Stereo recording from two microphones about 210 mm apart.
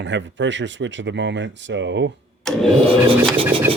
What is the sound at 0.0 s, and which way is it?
Speech, 60° right (ahead or behind).